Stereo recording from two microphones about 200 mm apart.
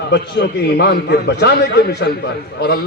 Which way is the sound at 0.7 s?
55° left (ahead or behind).